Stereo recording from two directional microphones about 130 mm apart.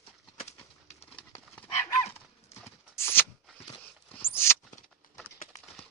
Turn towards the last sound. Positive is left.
turn(degrees=20)  # may be behind; listen again after turning